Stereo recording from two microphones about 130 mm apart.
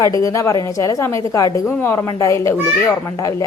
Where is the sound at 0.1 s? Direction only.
25° left (ahead or behind).